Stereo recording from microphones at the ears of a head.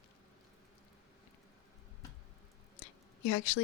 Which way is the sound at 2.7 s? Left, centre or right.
Left.